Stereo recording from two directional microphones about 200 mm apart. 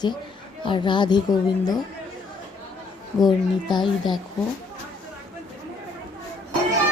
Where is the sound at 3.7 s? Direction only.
20° left (ahead or behind).